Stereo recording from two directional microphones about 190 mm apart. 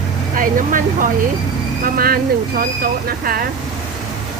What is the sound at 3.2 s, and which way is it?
Speech, 50° right (ahead or behind).